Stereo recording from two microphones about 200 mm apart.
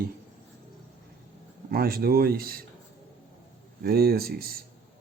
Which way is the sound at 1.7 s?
50° right (ahead or behind).